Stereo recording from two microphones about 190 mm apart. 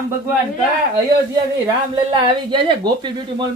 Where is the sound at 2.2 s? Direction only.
25° right (ahead or behind).